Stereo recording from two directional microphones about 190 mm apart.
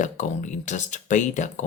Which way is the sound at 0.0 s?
40° left (ahead or behind).